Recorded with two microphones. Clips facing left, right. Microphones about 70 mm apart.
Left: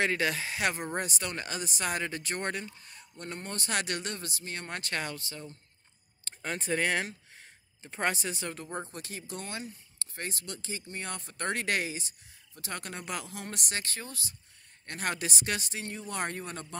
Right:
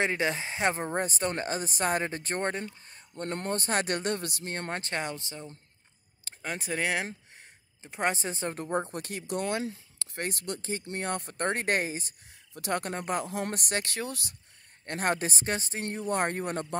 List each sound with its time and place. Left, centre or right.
0.0 s speech: right
3.3 s speech: right
4.5 s speech: right
6.2 s speech: centre; by 10.0 s right
10.1 s speech: right
11.4 s speech: right
12.5 s speech: right
14.9 s speech: right
15.8 s speech: right